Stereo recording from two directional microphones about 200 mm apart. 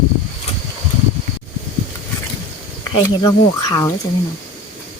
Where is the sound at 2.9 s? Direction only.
20° left (ahead or behind).